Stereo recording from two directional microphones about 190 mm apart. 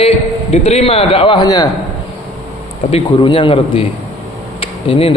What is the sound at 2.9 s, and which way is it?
A man's voice, 25° left (ahead or behind).